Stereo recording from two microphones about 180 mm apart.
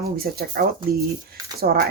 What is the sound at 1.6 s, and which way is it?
Speech, 55° right (ahead or behind).